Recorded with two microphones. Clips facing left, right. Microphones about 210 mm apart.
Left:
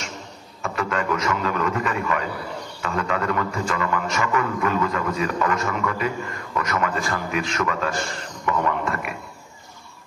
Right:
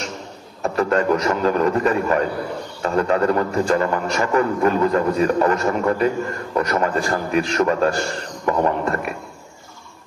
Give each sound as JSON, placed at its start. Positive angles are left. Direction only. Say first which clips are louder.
{"t": 0.6, "sound": "a man's voice", "louder": "right 7 dB", "side_deg": -35}